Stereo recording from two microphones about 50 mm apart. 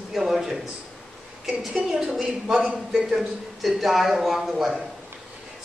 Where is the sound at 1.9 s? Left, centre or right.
Centre.